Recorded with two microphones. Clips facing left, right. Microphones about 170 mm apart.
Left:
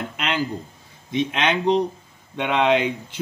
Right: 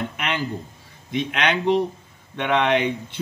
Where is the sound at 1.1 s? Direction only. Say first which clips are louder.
Left 1 dB; 20° left (ahead or behind).